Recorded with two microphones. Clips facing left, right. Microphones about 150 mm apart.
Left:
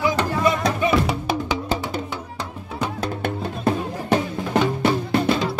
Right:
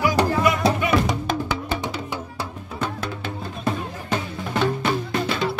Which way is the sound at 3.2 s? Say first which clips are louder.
Left 5 dB; 60° left (ahead or behind).